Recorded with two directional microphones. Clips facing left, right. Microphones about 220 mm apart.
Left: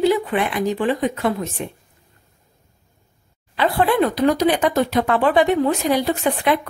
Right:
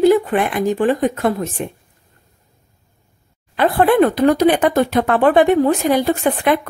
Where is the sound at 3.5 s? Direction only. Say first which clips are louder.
Right 4 dB; 50° right (ahead or behind).